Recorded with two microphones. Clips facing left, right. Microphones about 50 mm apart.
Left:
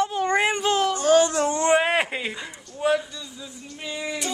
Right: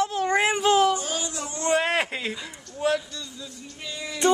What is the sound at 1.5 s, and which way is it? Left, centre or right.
Speech, left.